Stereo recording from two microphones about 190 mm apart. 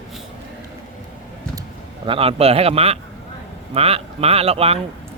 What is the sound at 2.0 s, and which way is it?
Speech, 30° right (ahead or behind).